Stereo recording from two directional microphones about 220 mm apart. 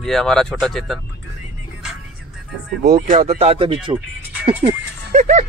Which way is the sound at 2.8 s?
30° right (ahead or behind).